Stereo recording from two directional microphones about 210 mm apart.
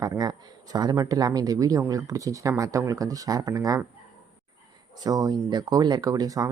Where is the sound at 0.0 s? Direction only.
15° right (ahead or behind).